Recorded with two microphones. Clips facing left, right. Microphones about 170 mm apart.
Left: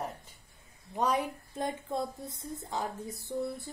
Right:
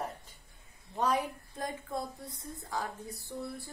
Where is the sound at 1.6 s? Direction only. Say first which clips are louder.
Left 4 dB; 25° left (ahead or behind).